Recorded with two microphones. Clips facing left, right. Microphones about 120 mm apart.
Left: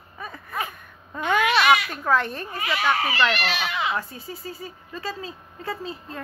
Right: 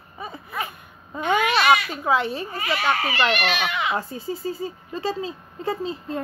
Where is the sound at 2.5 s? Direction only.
25° right (ahead or behind).